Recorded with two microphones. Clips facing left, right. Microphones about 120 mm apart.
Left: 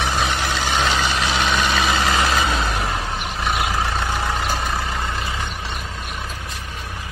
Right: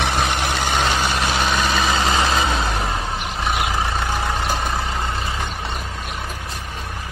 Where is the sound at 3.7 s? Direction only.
15° right (ahead or behind).